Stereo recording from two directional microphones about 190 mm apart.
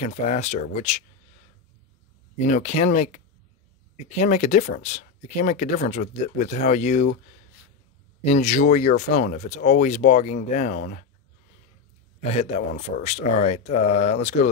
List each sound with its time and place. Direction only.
0.0 s speech: 35° left (ahead or behind)
2.3 s speech: 40° left (ahead or behind)
8.2 s speech: 35° left (ahead or behind)
12.2 s speech: 35° left (ahead or behind)